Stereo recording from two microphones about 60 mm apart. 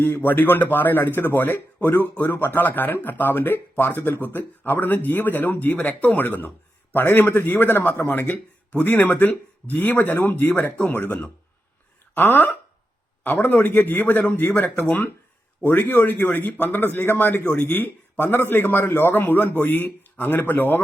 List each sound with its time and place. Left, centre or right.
0.0 s speech: left